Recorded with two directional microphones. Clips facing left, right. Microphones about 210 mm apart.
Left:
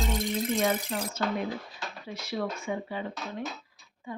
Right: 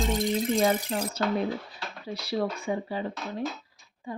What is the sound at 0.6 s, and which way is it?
Speech, 35° right (ahead or behind).